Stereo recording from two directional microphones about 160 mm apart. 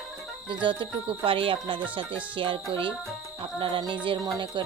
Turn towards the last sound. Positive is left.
turn(degrees=-25)  # may be behind; listen again after turning